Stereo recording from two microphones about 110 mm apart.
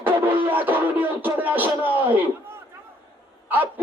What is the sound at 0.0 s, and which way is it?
Music, 15° right (ahead or behind).